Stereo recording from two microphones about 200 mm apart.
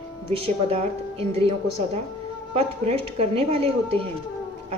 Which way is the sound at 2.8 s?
30° right (ahead or behind).